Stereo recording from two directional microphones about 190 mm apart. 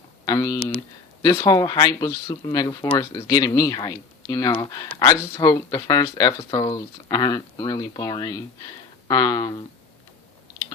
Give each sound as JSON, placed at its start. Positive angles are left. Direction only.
{"t": 0.3, "sound": "speech", "side_deg": 20}